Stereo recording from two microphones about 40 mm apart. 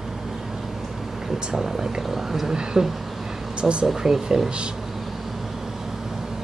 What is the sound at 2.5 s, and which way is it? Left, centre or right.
Speech, centre.